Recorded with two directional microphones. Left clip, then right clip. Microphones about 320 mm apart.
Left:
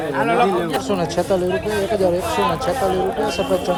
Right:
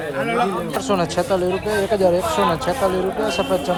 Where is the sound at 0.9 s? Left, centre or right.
Centre.